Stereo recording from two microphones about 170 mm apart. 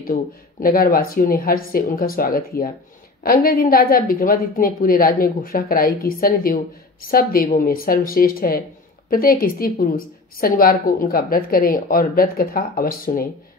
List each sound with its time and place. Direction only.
0.0 s a woman's voice: 60° left (ahead or behind)